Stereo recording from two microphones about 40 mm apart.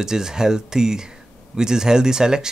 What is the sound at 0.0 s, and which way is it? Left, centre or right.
Speech, centre.